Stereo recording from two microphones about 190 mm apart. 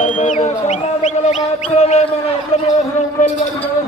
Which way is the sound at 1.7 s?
35° left (ahead or behind).